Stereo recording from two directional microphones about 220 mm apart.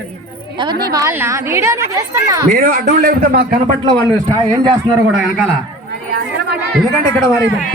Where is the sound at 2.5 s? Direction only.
40° right (ahead or behind).